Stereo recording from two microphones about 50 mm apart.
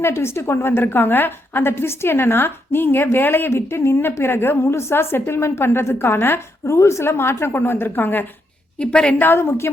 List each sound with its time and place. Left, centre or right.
0.0 s a woman's voice: left
6.7 s a woman's voice: left
8.8 s a woman's voice: centre
9.1 s a woman's voice: left
9.4 s a woman's voice: left